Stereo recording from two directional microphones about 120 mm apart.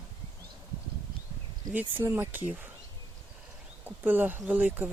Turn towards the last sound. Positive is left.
turn(degrees=-10)  # may be behind; listen again after turning